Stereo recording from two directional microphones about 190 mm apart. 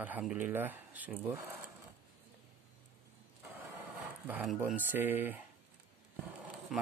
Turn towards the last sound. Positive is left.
turn(degrees=-5)  # may be behind; listen again after turning